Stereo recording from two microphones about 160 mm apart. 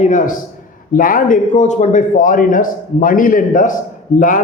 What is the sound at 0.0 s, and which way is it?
A man's voice, 50° left (ahead or behind).